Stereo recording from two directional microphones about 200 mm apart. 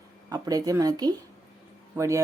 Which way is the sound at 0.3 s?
15° right (ahead or behind).